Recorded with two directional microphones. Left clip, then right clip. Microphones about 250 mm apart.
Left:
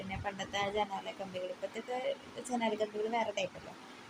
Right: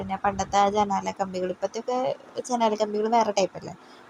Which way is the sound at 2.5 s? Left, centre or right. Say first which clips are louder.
Right 11 dB; right.